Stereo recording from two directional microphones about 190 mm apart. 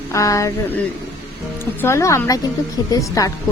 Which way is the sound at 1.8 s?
15° left (ahead or behind).